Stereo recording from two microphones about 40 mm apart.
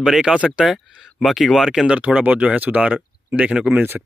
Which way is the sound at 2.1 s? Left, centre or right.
Right.